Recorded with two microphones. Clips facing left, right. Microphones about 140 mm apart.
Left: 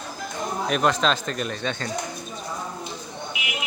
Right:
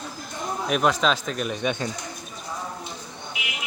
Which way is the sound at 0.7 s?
5° right (ahead or behind).